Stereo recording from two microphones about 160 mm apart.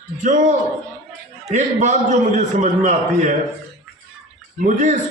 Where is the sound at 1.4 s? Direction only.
45° right (ahead or behind).